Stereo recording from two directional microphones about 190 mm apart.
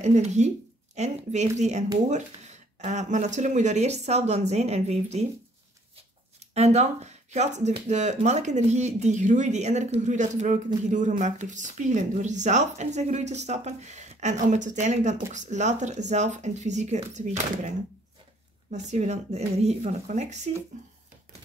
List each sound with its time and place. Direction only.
0.0 s speech: 35° right (ahead or behind)
6.5 s speech: 35° right (ahead or behind)